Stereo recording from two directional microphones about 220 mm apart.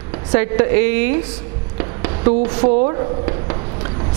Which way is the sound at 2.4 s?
10° right (ahead or behind).